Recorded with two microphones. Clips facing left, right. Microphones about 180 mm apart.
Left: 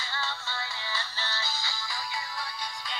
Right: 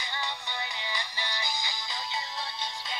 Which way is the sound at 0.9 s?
15° right (ahead or behind).